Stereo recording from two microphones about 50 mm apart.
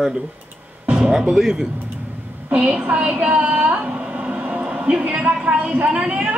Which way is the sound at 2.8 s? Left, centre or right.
Right.